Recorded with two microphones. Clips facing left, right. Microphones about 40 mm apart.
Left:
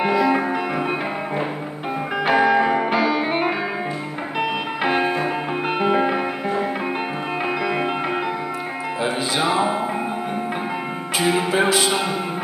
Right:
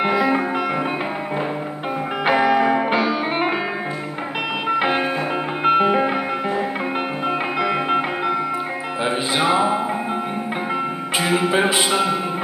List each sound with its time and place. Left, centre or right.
0.0 s music: centre
2.2 s music: centre
5.7 s music: centre
9.5 s music: centre